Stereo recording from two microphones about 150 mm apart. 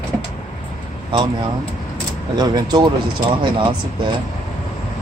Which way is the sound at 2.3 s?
30° right (ahead or behind).